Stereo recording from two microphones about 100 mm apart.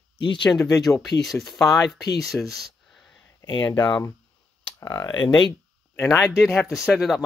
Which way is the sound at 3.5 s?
45° left (ahead or behind).